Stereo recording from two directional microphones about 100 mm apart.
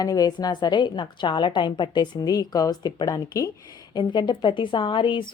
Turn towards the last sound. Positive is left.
turn(degrees=55)  # may be behind; listen again after turning